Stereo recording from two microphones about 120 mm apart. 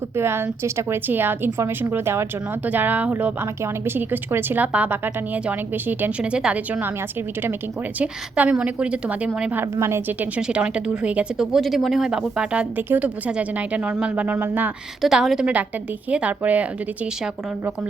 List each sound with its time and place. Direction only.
0.2 s a woman's voice: 20° right (ahead or behind)
7.9 s a woman's voice: 10° right (ahead or behind)
9.7 s a woman's voice: 25° right (ahead or behind)
15.0 s a woman's voice: centre (ahead or behind)